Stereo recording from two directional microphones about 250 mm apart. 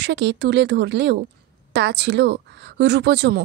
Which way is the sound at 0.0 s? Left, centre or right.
Right.